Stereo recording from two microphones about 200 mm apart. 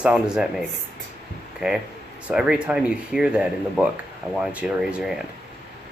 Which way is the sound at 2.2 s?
5° right (ahead or behind).